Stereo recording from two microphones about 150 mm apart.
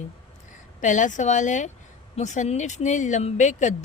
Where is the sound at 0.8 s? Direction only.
55° left (ahead or behind).